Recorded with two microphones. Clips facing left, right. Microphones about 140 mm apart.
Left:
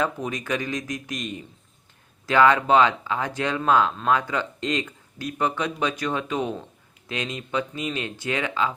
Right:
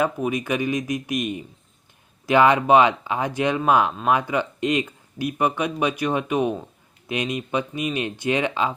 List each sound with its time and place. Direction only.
0.0 s speech: 10° right (ahead or behind)